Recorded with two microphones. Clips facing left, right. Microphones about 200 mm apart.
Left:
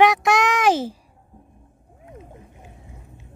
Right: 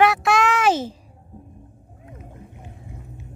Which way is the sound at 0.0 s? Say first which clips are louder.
Left 1 dB; 15° left (ahead or behind).